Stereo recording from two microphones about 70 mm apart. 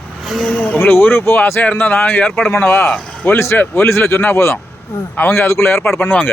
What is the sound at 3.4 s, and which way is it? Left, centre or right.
Speech, left.